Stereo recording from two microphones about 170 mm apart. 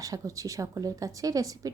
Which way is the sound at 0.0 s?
20° right (ahead or behind).